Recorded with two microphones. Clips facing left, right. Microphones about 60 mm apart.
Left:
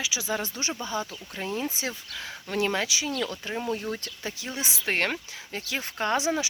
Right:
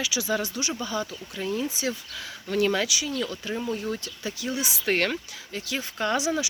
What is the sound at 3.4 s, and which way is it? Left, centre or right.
Speech, left.